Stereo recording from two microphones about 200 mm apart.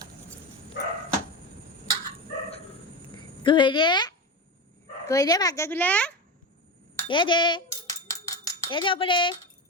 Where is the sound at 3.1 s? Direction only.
25° left (ahead or behind).